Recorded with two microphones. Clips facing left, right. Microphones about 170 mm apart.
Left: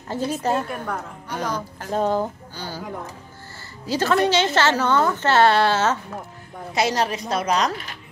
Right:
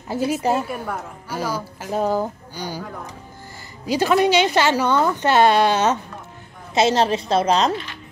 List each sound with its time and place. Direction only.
0.1 s a woman's voice: 10° right (ahead or behind)
3.8 s a woman's voice: 15° right (ahead or behind)